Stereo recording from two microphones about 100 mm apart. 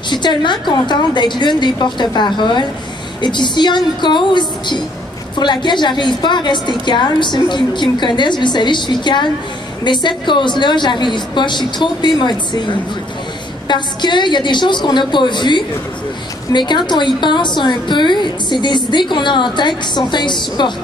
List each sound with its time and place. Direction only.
0.1 s a woman's voice: 50° left (ahead or behind)